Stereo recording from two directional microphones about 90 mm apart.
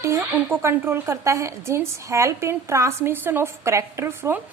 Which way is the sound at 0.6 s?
30° right (ahead or behind).